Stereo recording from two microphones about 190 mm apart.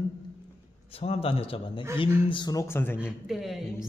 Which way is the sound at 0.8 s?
30° left (ahead or behind).